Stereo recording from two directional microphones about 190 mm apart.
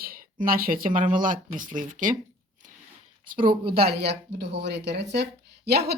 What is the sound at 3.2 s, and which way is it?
Speech, 45° right (ahead or behind).